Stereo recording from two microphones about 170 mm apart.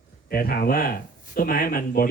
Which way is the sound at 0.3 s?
60° left (ahead or behind).